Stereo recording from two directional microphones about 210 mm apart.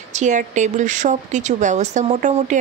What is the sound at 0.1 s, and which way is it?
Speech, 35° right (ahead or behind).